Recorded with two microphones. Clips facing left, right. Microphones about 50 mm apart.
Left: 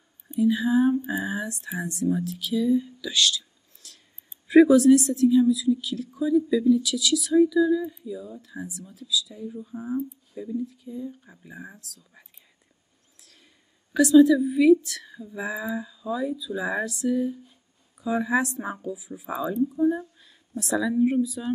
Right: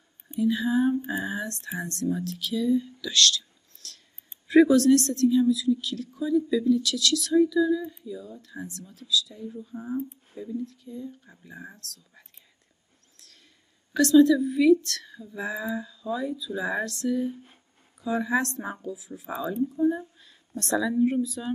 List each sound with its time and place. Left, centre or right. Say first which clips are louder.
0.4 s a woman's voice: left 3 dB; centre
13.2 s a sound: even; centre
13.9 s a woman's voice: left 2 dB; centre
17.3 s speech: left 3 dB; right
18.0 s a woman's voice: left 2 dB; centre